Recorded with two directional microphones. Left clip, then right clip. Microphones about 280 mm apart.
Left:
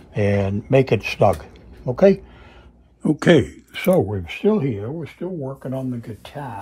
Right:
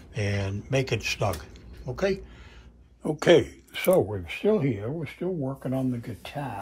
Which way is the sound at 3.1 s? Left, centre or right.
Left.